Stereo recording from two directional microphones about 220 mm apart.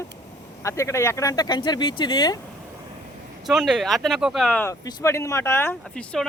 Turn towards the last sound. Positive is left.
turn(degrees=5)  # may be behind; listen again after turning